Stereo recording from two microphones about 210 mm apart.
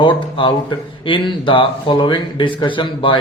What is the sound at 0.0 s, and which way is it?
Speech, 25° left (ahead or behind).